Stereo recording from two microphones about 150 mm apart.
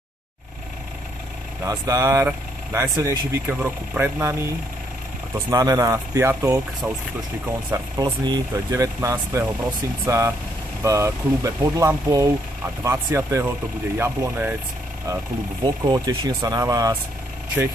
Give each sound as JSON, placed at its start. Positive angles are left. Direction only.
{"t": 1.6, "sound": "speech", "side_deg": -20}
{"t": 5.5, "sound": "speech", "side_deg": -25}
{"t": 8.0, "sound": "speech", "side_deg": -25}
{"t": 15.6, "sound": "speech", "side_deg": -30}